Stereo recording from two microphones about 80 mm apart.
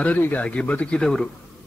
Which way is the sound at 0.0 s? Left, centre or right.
Centre.